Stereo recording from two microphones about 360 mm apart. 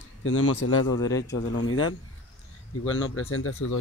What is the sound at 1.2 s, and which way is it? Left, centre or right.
Speech, left.